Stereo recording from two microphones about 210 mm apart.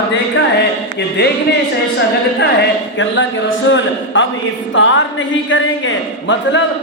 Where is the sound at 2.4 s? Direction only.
55° left (ahead or behind).